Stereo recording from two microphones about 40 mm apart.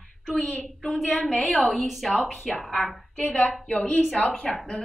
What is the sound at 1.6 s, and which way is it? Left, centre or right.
Speech, centre.